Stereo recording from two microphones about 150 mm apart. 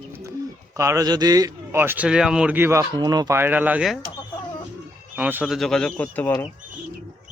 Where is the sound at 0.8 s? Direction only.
20° right (ahead or behind).